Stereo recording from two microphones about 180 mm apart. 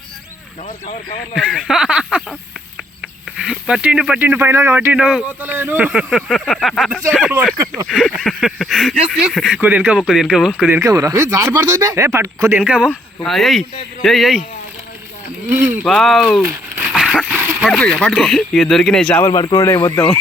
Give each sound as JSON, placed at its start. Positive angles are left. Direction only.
{"t": 1.4, "sound": "speech", "side_deg": 0}
{"t": 3.3, "sound": "speech", "side_deg": 0}
{"t": 10.8, "sound": "speech", "side_deg": -20}
{"t": 12.9, "sound": "speech", "side_deg": 5}
{"t": 15.9, "sound": "speech", "side_deg": 0}
{"t": 16.4, "sound": "crumpling", "side_deg": -10}
{"t": 16.9, "sound": "dog", "side_deg": 0}
{"t": 17.7, "sound": "speech", "side_deg": 0}
{"t": 19.3, "sound": "speech", "side_deg": 25}